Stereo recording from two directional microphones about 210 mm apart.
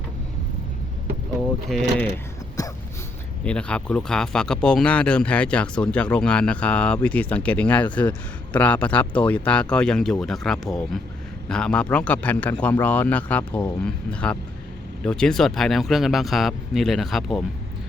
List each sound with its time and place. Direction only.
1.7 s speech: centre (ahead or behind)
2.6 s dog: 15° left (ahead or behind)
3.4 s a man's voice: 5° left (ahead or behind)